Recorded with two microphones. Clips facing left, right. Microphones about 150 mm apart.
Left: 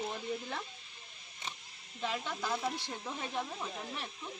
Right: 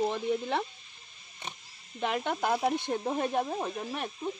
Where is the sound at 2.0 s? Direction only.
60° right (ahead or behind).